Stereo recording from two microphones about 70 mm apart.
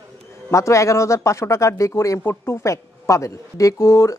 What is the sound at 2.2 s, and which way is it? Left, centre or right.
A woman's voice, left.